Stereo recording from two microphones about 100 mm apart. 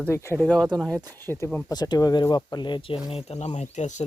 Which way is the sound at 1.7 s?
40° left (ahead or behind).